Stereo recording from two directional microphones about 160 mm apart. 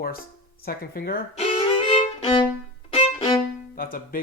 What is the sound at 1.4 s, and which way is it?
Violin, 40° left (ahead or behind).